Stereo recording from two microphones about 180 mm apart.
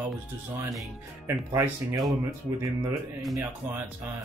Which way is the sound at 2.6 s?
20° right (ahead or behind).